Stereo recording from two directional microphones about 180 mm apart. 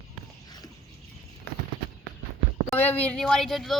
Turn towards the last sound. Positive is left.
turn(degrees=0)  # may be behind; listen again after turning